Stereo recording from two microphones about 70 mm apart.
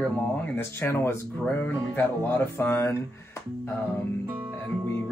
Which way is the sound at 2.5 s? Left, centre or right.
Left.